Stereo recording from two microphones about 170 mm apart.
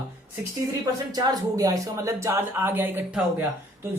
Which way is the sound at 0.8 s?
20° right (ahead or behind).